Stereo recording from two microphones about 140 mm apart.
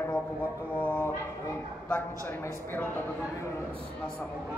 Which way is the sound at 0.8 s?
10° left (ahead or behind).